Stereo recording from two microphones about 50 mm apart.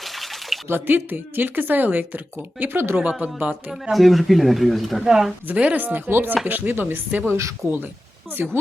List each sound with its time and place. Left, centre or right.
0.0 s a sound: centre
0.7 s a woman's voice: right
2.6 s chopping: right
3.0 s speech: right
3.9 s speech: centre
5.0 s a woman's voice: centre
5.5 s a woman's voice: right
5.8 s chopping: right
8.4 s chopping: right